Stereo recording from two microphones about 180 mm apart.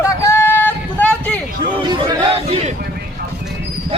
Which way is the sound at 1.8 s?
25° right (ahead or behind).